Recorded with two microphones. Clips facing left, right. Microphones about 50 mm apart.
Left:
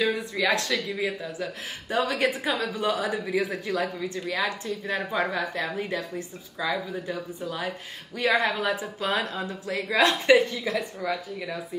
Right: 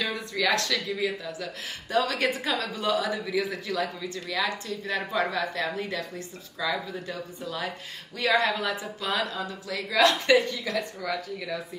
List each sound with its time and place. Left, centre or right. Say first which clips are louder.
0.0 s a sound: left 3 dB; centre
0.6 s speech: even; centre
2.2 s speech: left 2 dB; centre
2.5 s speech: even; left